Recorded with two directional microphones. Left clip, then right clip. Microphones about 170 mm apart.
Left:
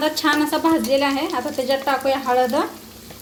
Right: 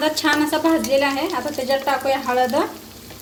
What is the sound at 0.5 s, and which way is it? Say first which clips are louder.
Speech: even; 40° left (ahead or behind).